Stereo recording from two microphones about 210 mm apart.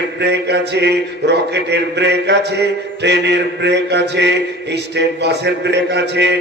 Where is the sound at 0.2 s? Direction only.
55° right (ahead or behind).